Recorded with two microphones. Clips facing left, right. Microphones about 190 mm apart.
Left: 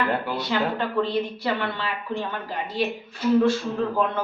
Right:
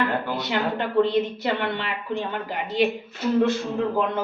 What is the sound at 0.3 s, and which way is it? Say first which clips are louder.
A woman's voice: even; 20° right (ahead or behind).